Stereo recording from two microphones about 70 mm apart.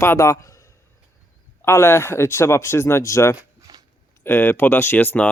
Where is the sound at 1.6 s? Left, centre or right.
Left.